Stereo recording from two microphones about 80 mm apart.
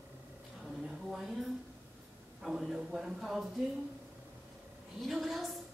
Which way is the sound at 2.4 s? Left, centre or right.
Centre.